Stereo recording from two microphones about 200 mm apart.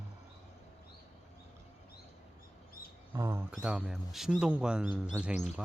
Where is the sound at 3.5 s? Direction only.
5° right (ahead or behind).